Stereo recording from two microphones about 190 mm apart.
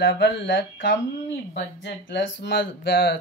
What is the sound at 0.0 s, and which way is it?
Speech, 65° left (ahead or behind).